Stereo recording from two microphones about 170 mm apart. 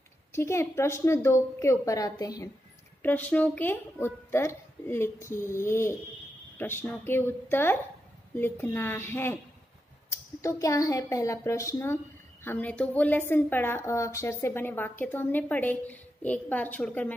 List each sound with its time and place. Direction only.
0.3 s a woman's voice: 15° left (ahead or behind)
3.0 s a woman's voice: 10° left (ahead or behind)
10.4 s a woman's voice: 20° left (ahead or behind)